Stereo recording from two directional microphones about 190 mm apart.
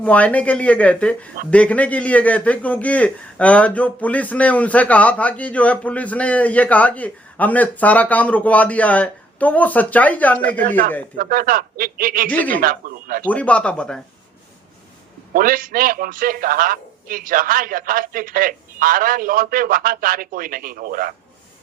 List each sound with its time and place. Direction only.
0.0 s a man's voice: 5° left (ahead or behind)
10.6 s a man's voice: 45° right (ahead or behind)
12.3 s a man's voice: 10° left (ahead or behind)
12.5 s a man's voice: 50° right (ahead or behind)
13.2 s a man's voice: 5° left (ahead or behind)
15.3 s a man's voice: 45° right (ahead or behind)